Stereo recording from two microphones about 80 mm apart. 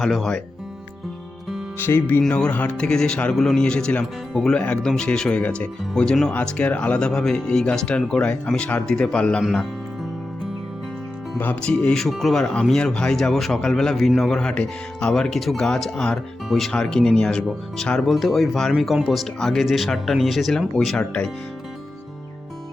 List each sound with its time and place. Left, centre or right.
0.0 s speech: centre
2.2 s speech: centre
2.7 s speech: centre
9.4 s speech: centre
11.3 s speech: left
11.7 s speech: centre
12.0 s speech: centre